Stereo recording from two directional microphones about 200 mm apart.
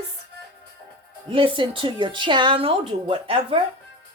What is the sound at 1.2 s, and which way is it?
Music, 25° right (ahead or behind).